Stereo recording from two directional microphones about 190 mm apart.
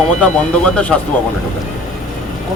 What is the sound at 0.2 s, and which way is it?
Speech, 5° left (ahead or behind).